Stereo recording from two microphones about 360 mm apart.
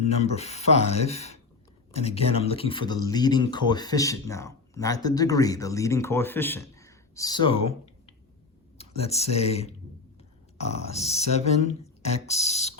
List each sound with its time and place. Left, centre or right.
0.0 s speech: centre
8.8 s speech: centre
10.8 s speech: centre